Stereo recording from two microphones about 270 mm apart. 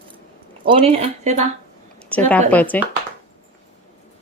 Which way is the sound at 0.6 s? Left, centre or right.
Centre.